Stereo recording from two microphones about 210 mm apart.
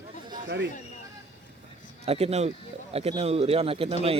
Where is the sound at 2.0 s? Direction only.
30° right (ahead or behind).